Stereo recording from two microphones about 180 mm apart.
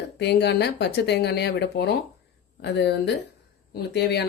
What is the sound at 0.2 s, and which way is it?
A woman's voice, 70° left (ahead or behind).